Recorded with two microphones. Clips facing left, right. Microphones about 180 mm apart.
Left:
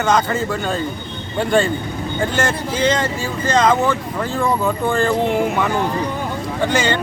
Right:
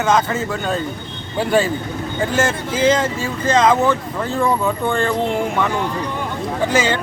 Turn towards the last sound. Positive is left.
turn(degrees=-5)  # may be behind; listen again after turning